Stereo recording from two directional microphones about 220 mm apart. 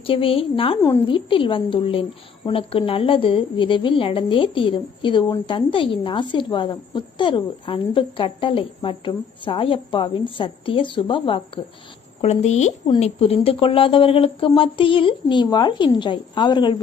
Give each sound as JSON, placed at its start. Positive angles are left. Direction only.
{"t": 0.0, "sound": "a woman's voice", "side_deg": 25}